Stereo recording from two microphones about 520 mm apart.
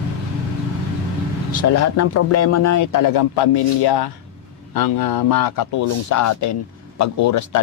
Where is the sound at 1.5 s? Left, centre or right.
Left.